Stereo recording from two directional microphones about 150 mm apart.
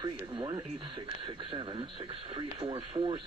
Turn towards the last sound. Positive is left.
turn(degrees=-35)  # may be behind; listen again after turning